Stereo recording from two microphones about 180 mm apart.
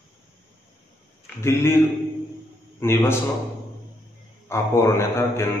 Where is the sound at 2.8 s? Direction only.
15° left (ahead or behind).